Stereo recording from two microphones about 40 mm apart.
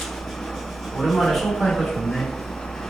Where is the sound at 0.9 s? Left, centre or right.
Centre.